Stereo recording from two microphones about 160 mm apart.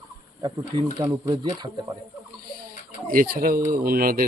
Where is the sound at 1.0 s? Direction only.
25° right (ahead or behind).